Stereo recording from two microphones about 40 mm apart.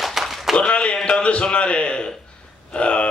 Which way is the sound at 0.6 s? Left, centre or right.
Left.